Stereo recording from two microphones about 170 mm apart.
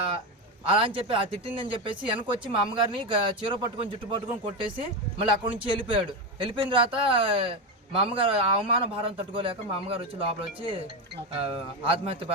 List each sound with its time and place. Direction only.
0.7 s speech: 30° right (ahead or behind)